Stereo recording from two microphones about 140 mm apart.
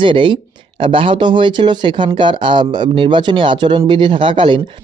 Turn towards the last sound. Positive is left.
turn(degrees=-35)  # may be behind; listen again after turning